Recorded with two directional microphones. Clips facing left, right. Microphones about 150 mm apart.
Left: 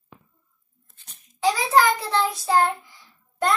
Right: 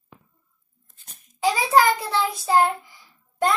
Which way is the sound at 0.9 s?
50° right (ahead or behind).